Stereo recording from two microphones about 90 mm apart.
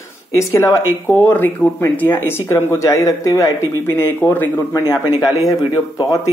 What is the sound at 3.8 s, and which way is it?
Speech, 25° left (ahead or behind).